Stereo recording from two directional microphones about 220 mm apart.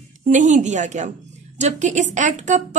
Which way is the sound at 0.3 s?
35° right (ahead or behind).